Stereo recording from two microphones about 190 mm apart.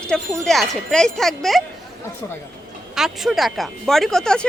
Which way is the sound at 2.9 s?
Centre (ahead or behind).